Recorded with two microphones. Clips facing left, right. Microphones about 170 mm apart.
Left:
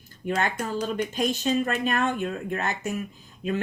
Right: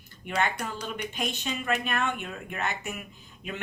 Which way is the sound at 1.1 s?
40° left (ahead or behind).